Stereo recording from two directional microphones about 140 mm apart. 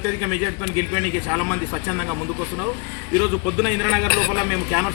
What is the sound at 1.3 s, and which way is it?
Speech, 10° left (ahead or behind).